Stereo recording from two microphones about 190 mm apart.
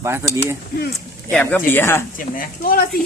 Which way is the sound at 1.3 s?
5° left (ahead or behind).